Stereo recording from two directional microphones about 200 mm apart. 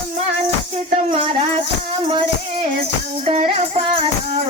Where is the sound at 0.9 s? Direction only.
30° right (ahead or behind).